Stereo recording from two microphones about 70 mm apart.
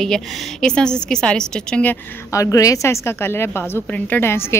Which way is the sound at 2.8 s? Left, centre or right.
Left.